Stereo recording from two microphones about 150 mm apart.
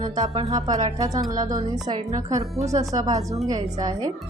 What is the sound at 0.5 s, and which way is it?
A woman's voice, 25° right (ahead or behind).